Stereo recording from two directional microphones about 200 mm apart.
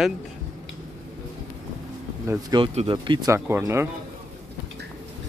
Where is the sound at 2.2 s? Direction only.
15° right (ahead or behind).